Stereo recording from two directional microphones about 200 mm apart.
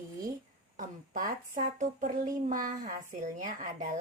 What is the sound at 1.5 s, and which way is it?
A woman's voice, 40° right (ahead or behind).